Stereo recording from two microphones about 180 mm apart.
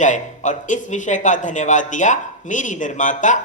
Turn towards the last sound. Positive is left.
turn(degrees=45)  # may be behind; listen again after turning